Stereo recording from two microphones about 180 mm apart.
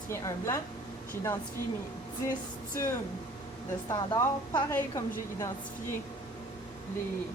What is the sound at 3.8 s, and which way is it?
Speech, 25° left (ahead or behind).